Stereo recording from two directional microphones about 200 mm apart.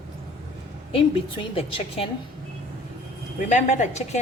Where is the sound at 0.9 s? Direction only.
25° left (ahead or behind).